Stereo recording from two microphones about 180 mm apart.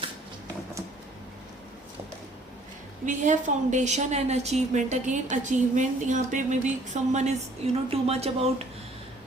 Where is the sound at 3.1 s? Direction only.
45° right (ahead or behind).